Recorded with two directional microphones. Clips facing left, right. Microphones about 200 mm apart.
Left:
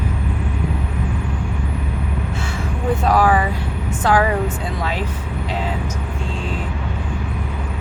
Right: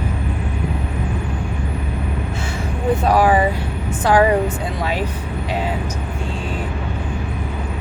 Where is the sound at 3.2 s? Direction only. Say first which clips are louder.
Right 2 dB; 25° right (ahead or behind).